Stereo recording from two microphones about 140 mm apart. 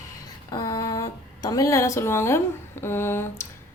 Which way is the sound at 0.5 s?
25° left (ahead or behind).